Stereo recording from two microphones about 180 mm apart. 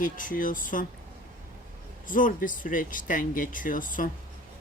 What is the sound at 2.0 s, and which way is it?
Speech, 50° left (ahead or behind).